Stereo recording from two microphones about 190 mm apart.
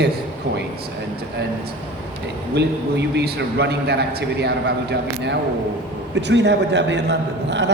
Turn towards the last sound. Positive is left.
turn(degrees=-65)  # may be behind; listen again after turning